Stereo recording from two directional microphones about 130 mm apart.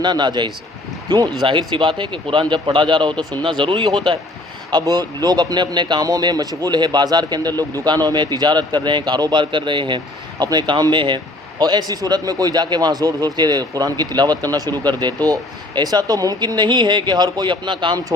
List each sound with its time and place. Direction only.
0.0 s a man's voice: 35° right (ahead or behind)